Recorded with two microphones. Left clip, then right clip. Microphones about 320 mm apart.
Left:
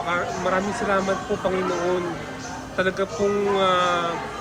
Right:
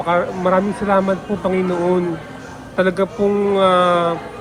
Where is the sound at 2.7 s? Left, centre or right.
Centre.